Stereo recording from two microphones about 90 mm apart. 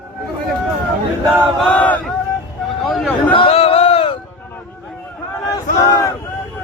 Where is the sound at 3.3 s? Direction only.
85° left.